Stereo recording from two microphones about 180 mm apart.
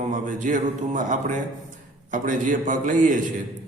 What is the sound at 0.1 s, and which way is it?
A man's voice, 45° right (ahead or behind).